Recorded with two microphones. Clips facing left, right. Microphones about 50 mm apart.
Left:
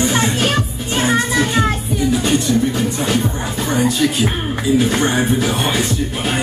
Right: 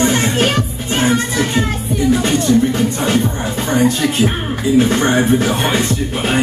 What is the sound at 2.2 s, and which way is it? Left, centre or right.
Music, right.